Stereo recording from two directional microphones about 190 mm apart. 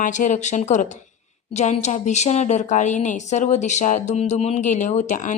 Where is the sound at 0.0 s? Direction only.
40° left (ahead or behind).